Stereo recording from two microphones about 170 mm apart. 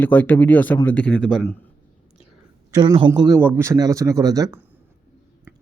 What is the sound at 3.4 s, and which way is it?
Speech, 15° right (ahead or behind).